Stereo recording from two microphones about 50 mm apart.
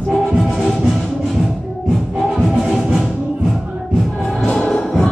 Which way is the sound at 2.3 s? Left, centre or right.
Centre.